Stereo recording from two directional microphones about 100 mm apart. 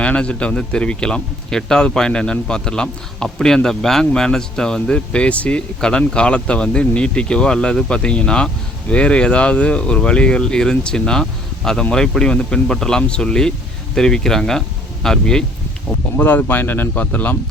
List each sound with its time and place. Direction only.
0.0 s speech: 10° left (ahead or behind)
16.1 s speech: 20° left (ahead or behind)